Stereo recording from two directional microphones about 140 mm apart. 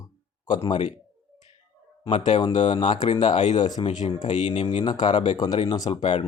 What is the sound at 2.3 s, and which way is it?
Speech, 35° left (ahead or behind).